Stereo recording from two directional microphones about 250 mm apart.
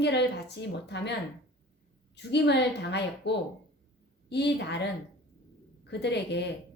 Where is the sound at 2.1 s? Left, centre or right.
Left.